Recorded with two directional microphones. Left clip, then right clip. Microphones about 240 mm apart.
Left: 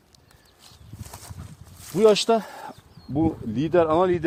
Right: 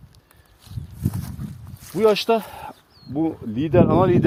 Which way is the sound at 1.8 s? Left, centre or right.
Left.